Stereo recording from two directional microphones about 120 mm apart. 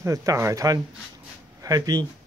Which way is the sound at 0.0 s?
25° right (ahead or behind).